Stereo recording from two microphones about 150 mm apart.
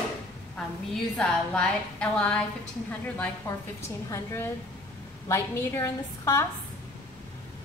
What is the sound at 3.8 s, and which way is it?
A woman's voice, 20° left (ahead or behind).